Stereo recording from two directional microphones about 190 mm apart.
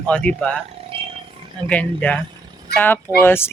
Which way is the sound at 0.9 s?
30° right (ahead or behind).